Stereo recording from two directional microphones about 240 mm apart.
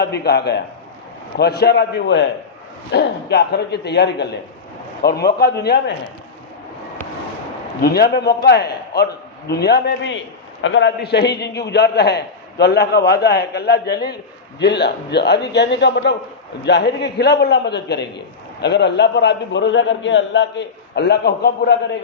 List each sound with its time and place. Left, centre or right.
0.0 s a man's voice: left
7.8 s a man's voice: left